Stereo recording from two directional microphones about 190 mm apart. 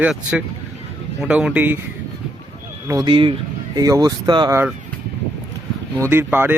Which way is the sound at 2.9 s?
20° right (ahead or behind).